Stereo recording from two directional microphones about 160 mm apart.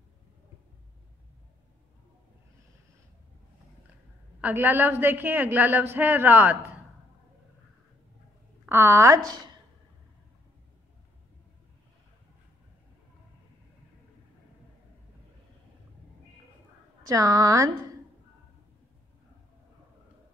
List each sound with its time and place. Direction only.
4.4 s a woman's voice: 10° right (ahead or behind)
8.6 s a woman's voice: 15° right (ahead or behind)
17.0 s a woman's voice: 20° right (ahead or behind)